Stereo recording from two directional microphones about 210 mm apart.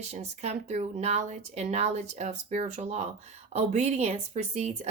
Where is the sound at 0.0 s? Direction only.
30° right (ahead or behind).